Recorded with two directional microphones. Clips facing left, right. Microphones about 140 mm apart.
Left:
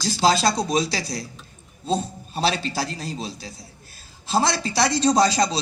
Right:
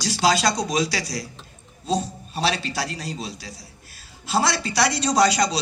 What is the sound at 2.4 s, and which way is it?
Speech, 30° left (ahead or behind).